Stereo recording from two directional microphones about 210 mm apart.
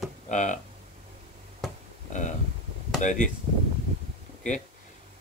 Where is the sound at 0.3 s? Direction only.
35° left (ahead or behind).